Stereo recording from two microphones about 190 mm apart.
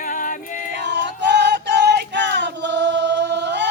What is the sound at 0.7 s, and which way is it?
Music, 65° right (ahead or behind).